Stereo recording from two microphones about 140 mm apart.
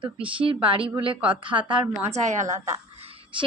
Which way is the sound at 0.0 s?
40° right (ahead or behind).